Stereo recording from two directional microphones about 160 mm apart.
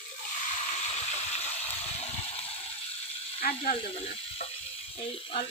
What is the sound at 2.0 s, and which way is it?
Vehicle, 40° left (ahead or behind).